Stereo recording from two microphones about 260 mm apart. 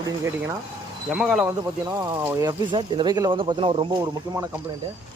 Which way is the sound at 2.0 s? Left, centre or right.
Centre.